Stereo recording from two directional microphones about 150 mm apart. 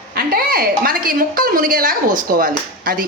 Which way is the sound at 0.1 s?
85° right.